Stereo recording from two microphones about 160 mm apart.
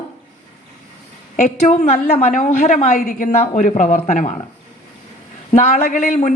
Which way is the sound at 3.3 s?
45° left (ahead or behind).